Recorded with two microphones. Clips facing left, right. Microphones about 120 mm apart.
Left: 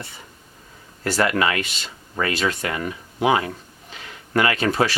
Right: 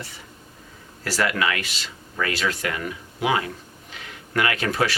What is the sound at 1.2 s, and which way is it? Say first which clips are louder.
Speech: left 3 dB; 30° left (ahead or behind).